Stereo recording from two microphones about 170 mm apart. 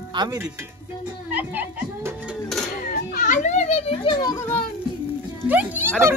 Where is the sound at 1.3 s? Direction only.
10° right (ahead or behind).